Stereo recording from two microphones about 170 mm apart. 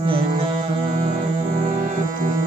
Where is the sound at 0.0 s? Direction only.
35° right (ahead or behind).